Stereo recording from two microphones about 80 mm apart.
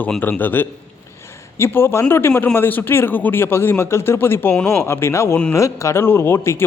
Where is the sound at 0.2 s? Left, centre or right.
Left.